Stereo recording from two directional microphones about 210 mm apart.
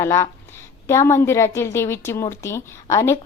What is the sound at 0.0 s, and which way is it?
A woman's voice, 15° left (ahead or behind).